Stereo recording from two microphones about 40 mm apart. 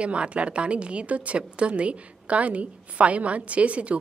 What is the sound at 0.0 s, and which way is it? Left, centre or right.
A woman's voice, right.